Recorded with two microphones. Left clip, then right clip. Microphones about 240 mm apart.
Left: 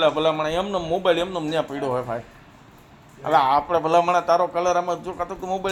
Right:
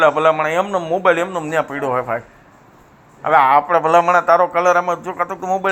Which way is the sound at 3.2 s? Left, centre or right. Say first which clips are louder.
Right 6 dB; centre.